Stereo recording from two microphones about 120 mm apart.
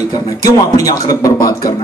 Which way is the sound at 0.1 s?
30° left (ahead or behind).